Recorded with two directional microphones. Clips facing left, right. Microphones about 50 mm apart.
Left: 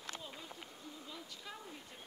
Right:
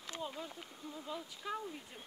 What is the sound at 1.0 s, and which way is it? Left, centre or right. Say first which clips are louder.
Speech: right 10 dB; centre.